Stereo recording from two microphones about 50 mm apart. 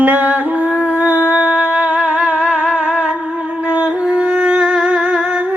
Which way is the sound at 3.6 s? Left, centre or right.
Right.